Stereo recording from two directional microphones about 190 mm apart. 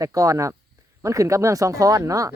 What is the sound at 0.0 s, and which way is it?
Speech, 15° right (ahead or behind).